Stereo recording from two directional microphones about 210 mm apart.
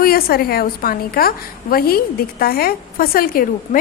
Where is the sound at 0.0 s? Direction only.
45° left (ahead or behind).